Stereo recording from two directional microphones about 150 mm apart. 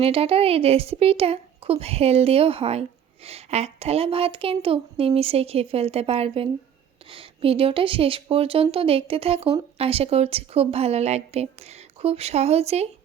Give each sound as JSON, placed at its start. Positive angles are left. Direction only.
{"t": 0.0, "sound": "a woman's voice", "side_deg": -40}